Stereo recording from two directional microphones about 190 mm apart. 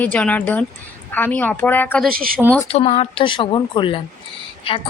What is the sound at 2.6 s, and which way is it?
Speech, 30° left (ahead or behind).